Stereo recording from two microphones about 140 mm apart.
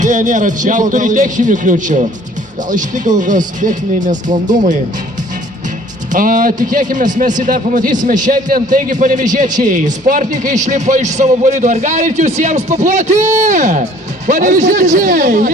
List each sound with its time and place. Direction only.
0.0 s a man's voice: 60° right (ahead or behind)
6.1 s a man's voice: 70° right (ahead or behind)